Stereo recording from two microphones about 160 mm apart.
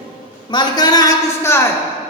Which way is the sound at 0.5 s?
25° left (ahead or behind).